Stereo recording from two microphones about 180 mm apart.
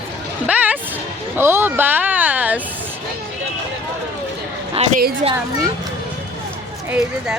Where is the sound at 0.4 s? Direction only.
10° right (ahead or behind).